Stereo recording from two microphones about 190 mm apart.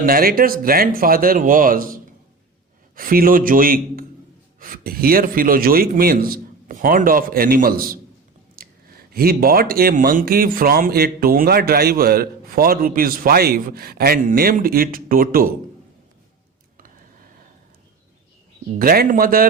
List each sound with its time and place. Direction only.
0.0 s speech: 50° right (ahead or behind)
18.8 s speech: 50° right (ahead or behind)